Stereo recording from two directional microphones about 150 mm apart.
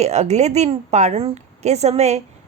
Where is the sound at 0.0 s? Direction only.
50° right (ahead or behind).